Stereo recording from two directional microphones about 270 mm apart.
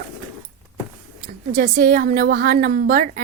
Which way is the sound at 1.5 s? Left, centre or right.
Right.